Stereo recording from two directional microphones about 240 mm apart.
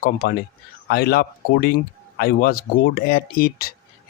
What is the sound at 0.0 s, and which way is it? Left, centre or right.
Speech, left.